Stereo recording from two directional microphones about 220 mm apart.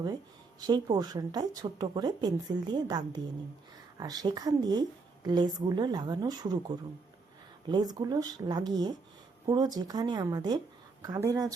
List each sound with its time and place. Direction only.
0.6 s a woman's voice: 15° right (ahead or behind)